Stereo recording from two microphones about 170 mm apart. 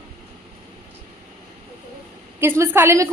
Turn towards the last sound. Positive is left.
turn(degrees=-15)  # may be behind; listen again after turning